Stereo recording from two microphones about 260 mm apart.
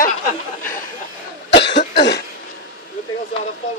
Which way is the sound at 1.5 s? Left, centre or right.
Left.